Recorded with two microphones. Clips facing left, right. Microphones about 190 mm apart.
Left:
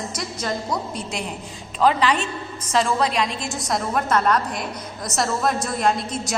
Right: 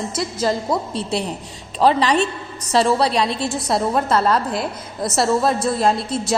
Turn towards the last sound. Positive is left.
turn(degrees=-30)  # may be behind; listen again after turning